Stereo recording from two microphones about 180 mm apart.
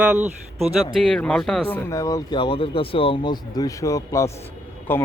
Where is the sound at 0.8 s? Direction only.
5° left (ahead or behind).